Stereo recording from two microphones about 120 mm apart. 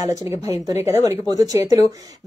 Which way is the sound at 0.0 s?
30° right (ahead or behind).